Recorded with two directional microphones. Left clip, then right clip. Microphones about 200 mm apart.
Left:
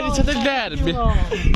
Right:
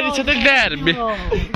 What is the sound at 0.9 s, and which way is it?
Speech, 20° right (ahead or behind).